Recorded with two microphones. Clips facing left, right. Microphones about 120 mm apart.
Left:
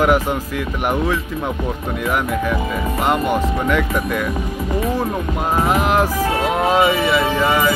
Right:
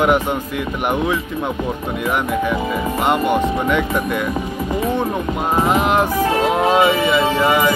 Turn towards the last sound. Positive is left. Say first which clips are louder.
# right 1 dB
turn(degrees=-10)  # may be behind; listen again after turning